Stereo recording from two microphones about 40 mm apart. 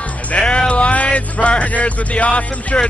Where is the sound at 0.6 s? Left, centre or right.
Left.